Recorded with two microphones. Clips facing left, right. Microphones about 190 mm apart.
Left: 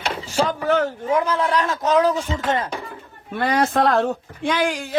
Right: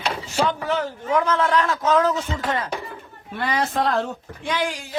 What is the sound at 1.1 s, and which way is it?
A man's voice, 15° left (ahead or behind).